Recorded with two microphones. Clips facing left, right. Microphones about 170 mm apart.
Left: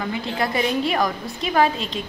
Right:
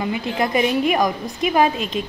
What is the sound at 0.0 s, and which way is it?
A woman's voice, 20° right (ahead or behind).